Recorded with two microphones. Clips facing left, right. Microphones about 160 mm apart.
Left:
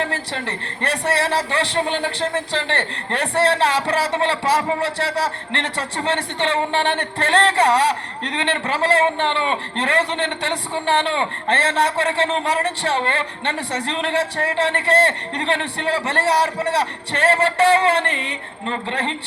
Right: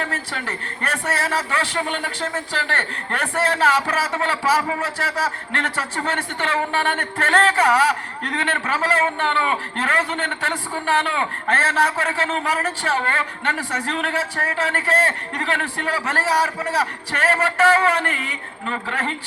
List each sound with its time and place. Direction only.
0.0 s a man's voice: 30° left (ahead or behind)